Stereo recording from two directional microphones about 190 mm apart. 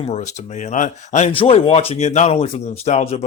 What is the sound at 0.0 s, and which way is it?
Speech, 35° left (ahead or behind).